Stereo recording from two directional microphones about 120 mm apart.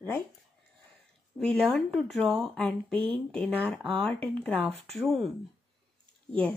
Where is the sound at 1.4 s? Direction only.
5° left (ahead or behind).